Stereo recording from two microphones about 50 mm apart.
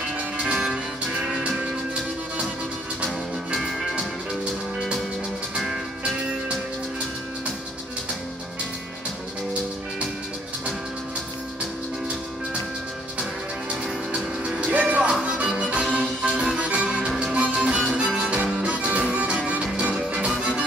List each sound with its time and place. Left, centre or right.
3.5 s music: centre
5.6 s music: centre
14.1 s music: centre
14.7 s music: right; by 16.5 s centre
16.5 s music: right